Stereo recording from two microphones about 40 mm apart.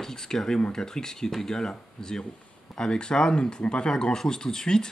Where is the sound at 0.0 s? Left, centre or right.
Centre.